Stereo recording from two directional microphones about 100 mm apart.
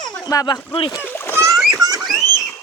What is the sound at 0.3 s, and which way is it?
Speech, 40° left (ahead or behind).